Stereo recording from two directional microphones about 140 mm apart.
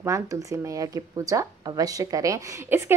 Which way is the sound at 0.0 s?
25° right (ahead or behind).